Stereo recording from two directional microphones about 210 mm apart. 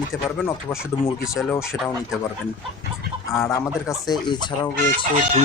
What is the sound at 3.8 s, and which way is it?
Speech, 20° left (ahead or behind).